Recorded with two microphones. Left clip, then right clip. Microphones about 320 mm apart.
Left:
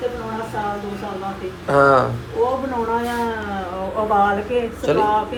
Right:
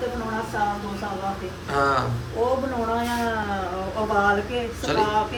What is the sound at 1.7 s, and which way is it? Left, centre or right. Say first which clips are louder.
Speech: left 8 dB; centre.